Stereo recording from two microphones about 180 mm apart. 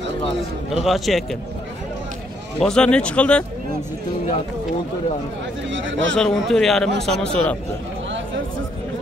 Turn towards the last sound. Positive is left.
turn(degrees=5)  # may be behind; listen again after turning